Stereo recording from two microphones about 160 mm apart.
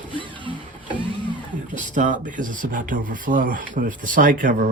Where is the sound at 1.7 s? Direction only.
55° right (ahead or behind).